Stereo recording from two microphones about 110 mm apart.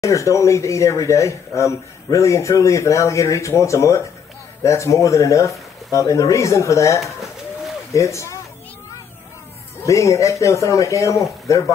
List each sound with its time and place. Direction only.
0.0 s speech: 30° left (ahead or behind)
9.8 s speech: 30° left (ahead or behind)